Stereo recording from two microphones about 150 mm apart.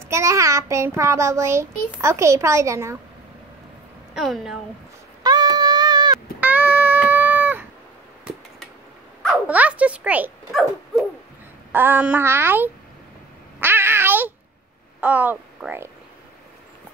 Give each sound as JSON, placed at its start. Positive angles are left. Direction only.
{"t": 0.1, "sound": "a child's voice", "side_deg": -20}
{"t": 4.1, "sound": "dog", "side_deg": 0}
{"t": 5.2, "sound": "a sound", "side_deg": -25}
{"t": 6.4, "sound": "music", "side_deg": -10}
{"t": 9.5, "sound": "a child's voice", "side_deg": -10}
{"t": 10.5, "sound": "dog", "side_deg": 0}
{"t": 11.7, "sound": "a child's voice", "side_deg": -15}
{"t": 13.6, "sound": "a sound", "side_deg": -15}
{"t": 15.0, "sound": "speech", "side_deg": -10}